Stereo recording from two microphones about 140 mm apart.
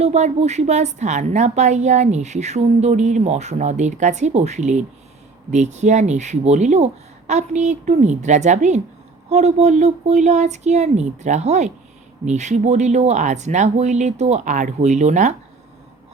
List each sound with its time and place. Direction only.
0.0 s a woman's voice: 50° right (ahead or behind)